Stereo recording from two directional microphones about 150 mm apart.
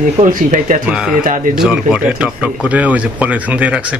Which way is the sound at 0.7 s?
65° right (ahead or behind).